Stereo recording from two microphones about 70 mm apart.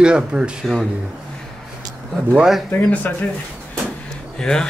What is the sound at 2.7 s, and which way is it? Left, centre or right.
Speech, left.